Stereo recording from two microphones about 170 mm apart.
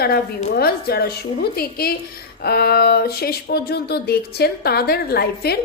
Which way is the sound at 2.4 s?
70° left (ahead or behind).